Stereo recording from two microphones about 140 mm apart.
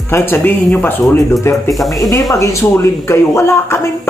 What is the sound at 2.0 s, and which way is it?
Speech, 25° left (ahead or behind).